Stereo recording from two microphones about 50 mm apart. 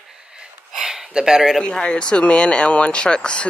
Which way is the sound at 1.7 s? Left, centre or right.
Centre.